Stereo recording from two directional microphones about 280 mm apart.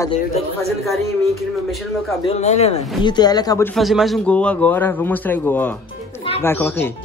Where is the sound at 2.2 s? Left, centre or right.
Left.